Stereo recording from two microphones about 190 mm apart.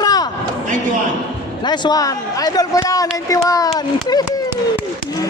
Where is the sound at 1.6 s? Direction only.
25° left (ahead or behind).